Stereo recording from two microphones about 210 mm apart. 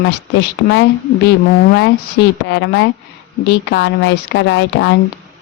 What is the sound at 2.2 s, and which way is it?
A woman's voice, 55° left (ahead or behind).